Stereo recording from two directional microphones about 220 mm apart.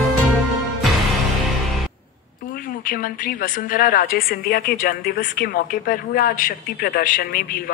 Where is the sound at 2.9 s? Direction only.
40° left (ahead or behind).